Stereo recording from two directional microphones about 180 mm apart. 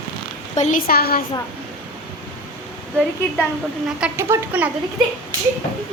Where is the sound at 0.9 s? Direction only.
55° left (ahead or behind).